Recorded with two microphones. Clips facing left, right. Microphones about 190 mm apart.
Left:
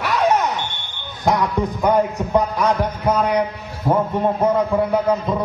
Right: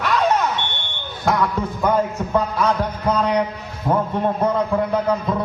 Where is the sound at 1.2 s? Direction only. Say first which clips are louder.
Left 2 dB; 15° left (ahead or behind).